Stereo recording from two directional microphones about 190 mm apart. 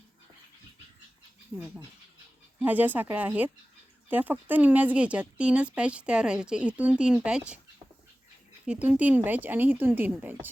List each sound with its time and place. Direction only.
1.5 s speech: 5° right (ahead or behind)
8.6 s speech: 5° right (ahead or behind)